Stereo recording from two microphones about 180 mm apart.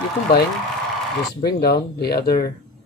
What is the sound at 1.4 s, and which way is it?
Speech, 60° left (ahead or behind).